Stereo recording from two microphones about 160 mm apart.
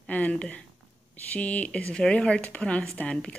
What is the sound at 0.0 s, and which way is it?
Speech, 10° left (ahead or behind).